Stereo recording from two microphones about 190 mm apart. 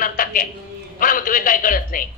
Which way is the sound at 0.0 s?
45° left (ahead or behind).